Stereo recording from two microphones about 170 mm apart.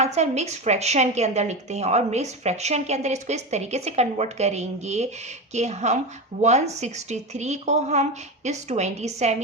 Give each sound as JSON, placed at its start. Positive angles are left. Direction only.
{"t": 0.0, "sound": "a woman's voice", "side_deg": -40}